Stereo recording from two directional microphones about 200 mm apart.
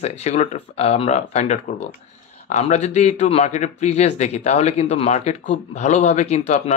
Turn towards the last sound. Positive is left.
turn(degrees=35)  # may be behind; listen again after turning